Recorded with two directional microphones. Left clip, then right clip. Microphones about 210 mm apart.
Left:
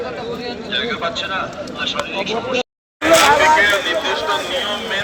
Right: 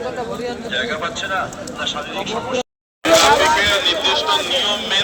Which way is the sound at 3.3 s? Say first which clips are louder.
Left 2 dB; 60° right (ahead or behind).